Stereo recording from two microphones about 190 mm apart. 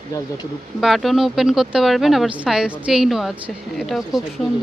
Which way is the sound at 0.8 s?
Centre (ahead or behind).